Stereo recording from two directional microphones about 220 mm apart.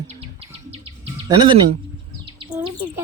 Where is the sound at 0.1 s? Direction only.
25° right (ahead or behind).